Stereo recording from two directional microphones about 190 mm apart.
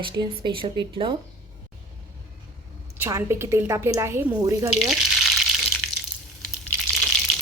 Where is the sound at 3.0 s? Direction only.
15° right (ahead or behind).